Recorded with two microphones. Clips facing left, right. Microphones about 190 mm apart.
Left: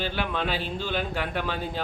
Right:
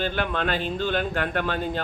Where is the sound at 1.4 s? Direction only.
50° right (ahead or behind).